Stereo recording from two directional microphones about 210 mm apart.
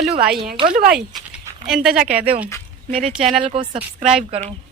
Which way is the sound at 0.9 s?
5° right (ahead or behind).